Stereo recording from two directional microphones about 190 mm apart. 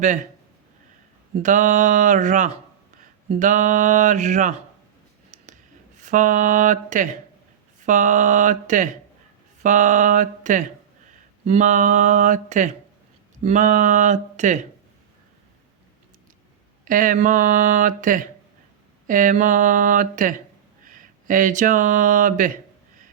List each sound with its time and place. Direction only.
1.4 s speech: 40° right (ahead or behind)
6.0 s speech: 40° right (ahead or behind)
16.8 s speech: 45° right (ahead or behind)